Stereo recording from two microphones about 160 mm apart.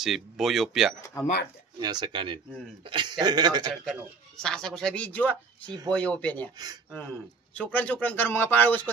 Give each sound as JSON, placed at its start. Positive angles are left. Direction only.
{"t": 0.0, "sound": "speech", "side_deg": 0}
{"t": 1.8, "sound": "speech", "side_deg": -25}
{"t": 3.8, "sound": "a man's voice", "side_deg": 5}